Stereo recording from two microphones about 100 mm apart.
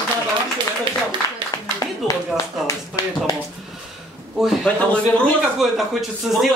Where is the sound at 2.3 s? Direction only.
30° left (ahead or behind).